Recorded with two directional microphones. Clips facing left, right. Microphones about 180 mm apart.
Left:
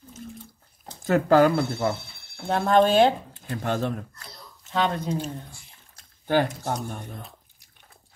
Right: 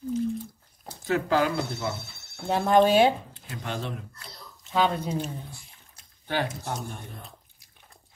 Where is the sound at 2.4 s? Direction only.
10° right (ahead or behind).